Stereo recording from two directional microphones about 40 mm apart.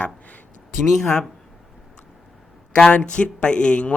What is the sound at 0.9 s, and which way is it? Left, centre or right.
Speech, centre.